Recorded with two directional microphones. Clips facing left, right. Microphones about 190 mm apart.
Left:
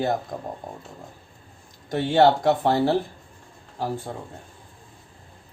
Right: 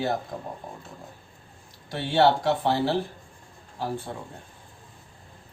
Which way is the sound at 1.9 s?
50° left (ahead or behind).